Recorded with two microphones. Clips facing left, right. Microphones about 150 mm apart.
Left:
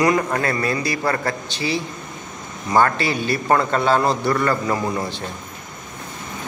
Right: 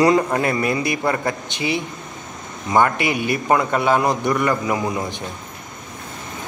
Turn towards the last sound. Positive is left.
turn(degrees=-15)  # may be behind; listen again after turning